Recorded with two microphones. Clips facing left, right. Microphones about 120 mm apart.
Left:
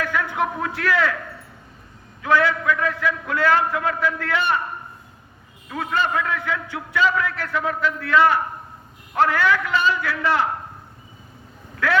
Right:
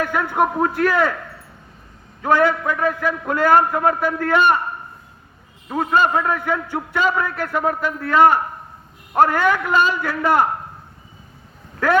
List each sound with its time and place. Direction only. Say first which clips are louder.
0.0 s a man's voice: right 4 dB; 45° right (ahead or behind)
2.2 s a man's voice: right 2 dB; 45° right (ahead or behind)
5.6 s a man's voice: right 6 dB; 40° right (ahead or behind)